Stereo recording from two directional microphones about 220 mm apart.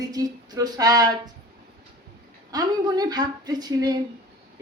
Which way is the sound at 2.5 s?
20° right (ahead or behind).